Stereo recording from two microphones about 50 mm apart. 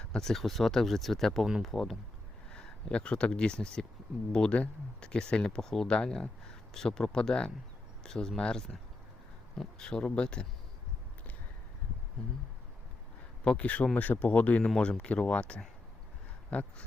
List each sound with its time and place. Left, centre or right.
0.2 s speech: centre
2.5 s speech: centre
13.4 s a man's voice: left